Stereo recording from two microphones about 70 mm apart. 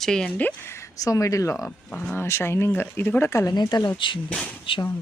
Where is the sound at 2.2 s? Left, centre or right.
Left.